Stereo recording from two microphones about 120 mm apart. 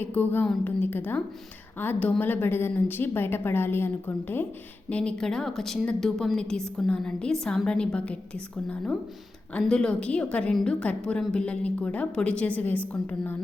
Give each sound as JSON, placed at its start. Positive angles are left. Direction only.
{"t": 0.0, "sound": "a woman's voice", "side_deg": 15}